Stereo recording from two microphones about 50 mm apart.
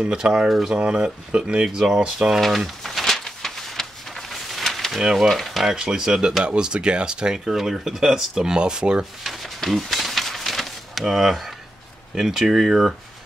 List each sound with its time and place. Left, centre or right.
0.0 s speech: centre
0.5 s speech: centre
0.7 s speech: centre
2.4 s a sound: centre
5.0 s speech: centre
5.3 s speech: centre
9.2 s a sound: centre
12.2 s speech: centre